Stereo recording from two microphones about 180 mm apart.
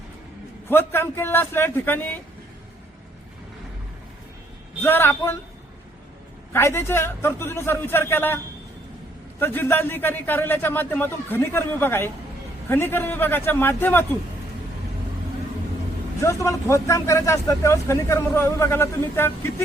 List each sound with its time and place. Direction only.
0.7 s speech: 10° left (ahead or behind)
4.8 s speech: 10° left (ahead or behind)
6.5 s speech: 15° left (ahead or behind)
9.4 s speech: 10° left (ahead or behind)
16.2 s speech: 15° left (ahead or behind)